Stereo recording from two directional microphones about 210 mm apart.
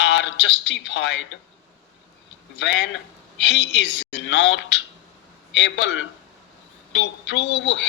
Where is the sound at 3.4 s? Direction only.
60° left (ahead or behind).